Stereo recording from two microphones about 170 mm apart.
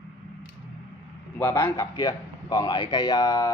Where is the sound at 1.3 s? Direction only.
15° left (ahead or behind).